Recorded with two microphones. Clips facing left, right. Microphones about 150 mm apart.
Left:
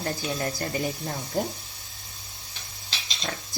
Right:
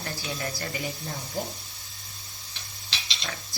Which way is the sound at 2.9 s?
45° left (ahead or behind).